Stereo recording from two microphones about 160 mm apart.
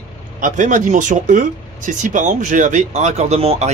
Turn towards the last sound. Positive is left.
turn(degrees=-40)  # may be behind; listen again after turning